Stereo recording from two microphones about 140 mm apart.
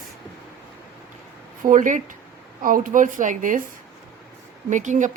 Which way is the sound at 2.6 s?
75° right (ahead or behind).